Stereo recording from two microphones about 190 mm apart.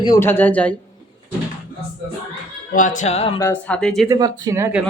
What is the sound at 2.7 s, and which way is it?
Speech, 45° left (ahead or behind).